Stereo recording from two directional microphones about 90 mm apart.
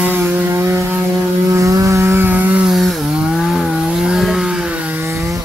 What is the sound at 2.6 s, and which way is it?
Chainsaw, centre (ahead or behind).